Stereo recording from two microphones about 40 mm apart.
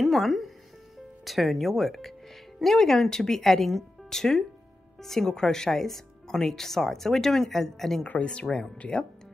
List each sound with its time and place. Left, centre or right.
0.0 s speech: centre
8.2 s speech: left